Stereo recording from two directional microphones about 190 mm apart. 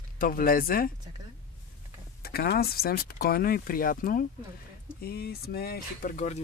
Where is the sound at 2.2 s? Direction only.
55° left (ahead or behind).